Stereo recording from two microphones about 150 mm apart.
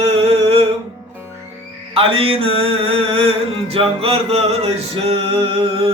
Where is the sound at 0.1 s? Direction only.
40° right (ahead or behind).